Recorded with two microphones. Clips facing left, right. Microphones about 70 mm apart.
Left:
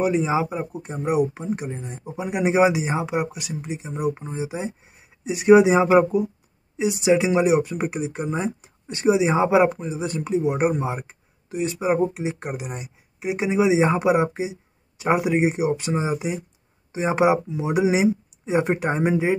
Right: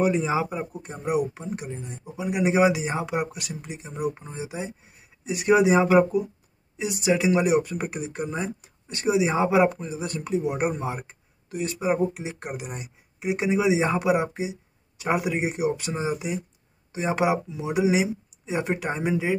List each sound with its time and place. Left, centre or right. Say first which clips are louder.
0.0 s speech: left 2 dB; centre; by 19.3 s left